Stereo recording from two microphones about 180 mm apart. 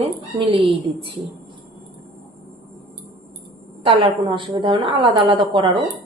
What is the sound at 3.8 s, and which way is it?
A woman's voice, 30° right (ahead or behind).